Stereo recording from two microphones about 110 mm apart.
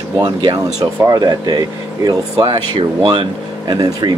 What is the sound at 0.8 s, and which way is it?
Speech, 30° right (ahead or behind).